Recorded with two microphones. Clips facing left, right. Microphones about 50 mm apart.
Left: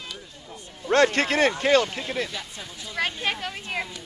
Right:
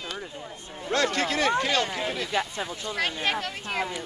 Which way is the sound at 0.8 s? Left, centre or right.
Left.